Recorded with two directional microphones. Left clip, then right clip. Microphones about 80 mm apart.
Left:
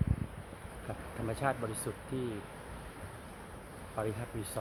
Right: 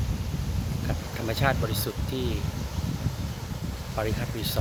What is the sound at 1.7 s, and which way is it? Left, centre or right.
Speech, centre.